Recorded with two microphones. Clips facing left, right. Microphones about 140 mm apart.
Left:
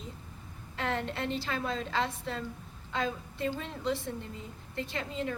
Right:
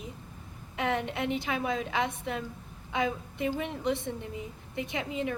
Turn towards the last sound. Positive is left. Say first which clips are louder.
# right 2 dB
turn(degrees=-15)  # may be behind; listen again after turning